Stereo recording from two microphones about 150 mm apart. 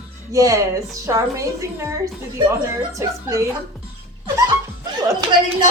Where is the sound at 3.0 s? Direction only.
20° right (ahead or behind).